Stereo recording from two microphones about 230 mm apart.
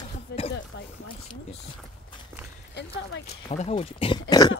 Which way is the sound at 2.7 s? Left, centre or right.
Left.